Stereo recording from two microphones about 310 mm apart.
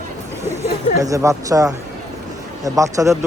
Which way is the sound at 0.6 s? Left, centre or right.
Centre.